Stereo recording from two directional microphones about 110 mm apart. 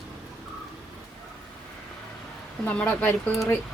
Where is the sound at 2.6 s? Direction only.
15° left (ahead or behind).